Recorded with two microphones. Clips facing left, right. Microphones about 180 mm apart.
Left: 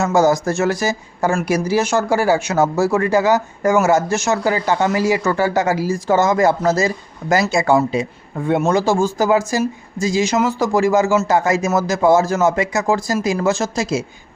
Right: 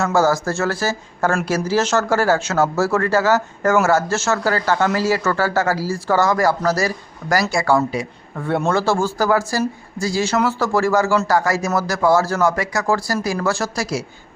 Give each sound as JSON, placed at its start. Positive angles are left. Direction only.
{"t": 0.0, "sound": "speech", "side_deg": 20}